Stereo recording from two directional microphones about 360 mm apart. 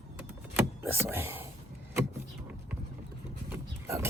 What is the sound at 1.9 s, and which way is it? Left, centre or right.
Vehicle, centre.